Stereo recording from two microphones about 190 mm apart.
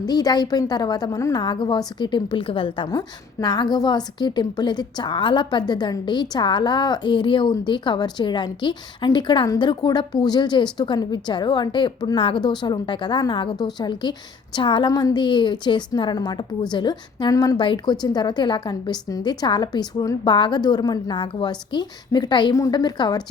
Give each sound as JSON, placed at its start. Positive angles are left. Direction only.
{"t": 0.0, "sound": "a woman's voice", "side_deg": 20}